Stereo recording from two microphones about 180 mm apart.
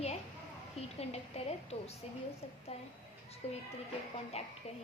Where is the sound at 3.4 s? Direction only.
35° left (ahead or behind).